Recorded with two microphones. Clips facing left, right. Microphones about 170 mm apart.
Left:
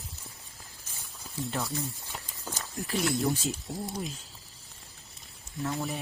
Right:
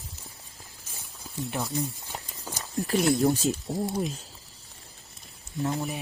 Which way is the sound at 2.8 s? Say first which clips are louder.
Right 6 dB; 40° right (ahead or behind).